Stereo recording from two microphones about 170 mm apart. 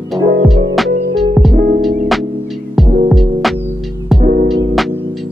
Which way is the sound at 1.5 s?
55° right (ahead or behind).